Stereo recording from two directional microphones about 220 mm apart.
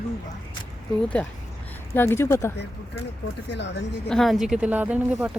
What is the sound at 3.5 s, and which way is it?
Speech, 50° left (ahead or behind).